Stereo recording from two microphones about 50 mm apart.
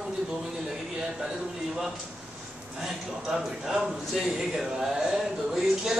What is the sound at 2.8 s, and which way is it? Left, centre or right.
Speech, centre.